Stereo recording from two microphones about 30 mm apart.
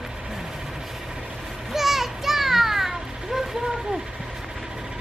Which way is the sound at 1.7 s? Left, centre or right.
Centre.